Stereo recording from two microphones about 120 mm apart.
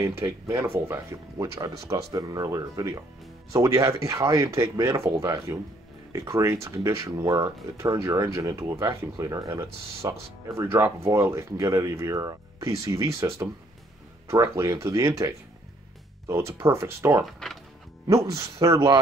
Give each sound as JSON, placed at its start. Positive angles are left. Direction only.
{"t": 0.0, "sound": "speech", "side_deg": -25}
{"t": 17.2, "sound": "speech", "side_deg": 0}
{"t": 18.0, "sound": "speech", "side_deg": -30}